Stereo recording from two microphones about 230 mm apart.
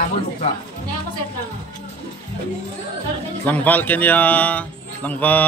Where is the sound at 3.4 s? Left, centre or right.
Centre.